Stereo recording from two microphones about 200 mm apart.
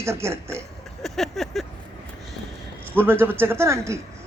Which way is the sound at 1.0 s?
Centre (ahead or behind).